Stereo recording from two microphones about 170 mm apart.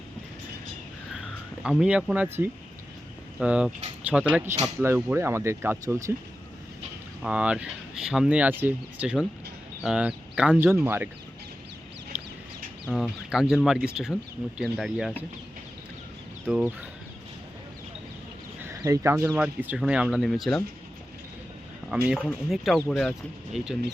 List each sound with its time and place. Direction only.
1.6 s speech: 5° right (ahead or behind)
7.2 s speech: 5° right (ahead or behind)
12.9 s speech: centre (ahead or behind)
16.5 s speech: 5° right (ahead or behind)
18.6 s speech: 20° right (ahead or behind); by 20.6 s centre (ahead or behind)
21.8 s speech: 5° right (ahead or behind)